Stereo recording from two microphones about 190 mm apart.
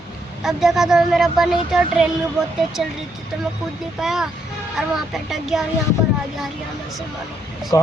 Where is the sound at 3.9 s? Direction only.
Centre (ahead or behind).